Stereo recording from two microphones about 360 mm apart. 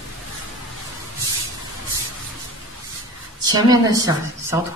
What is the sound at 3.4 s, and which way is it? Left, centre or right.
A woman's voice, centre.